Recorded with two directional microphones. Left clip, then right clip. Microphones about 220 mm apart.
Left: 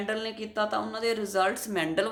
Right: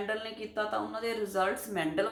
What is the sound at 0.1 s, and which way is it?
A woman's voice, 45° left (ahead or behind).